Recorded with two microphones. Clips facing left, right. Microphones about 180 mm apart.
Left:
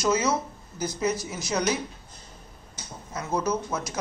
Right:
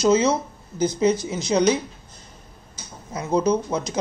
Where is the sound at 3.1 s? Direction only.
20° right (ahead or behind).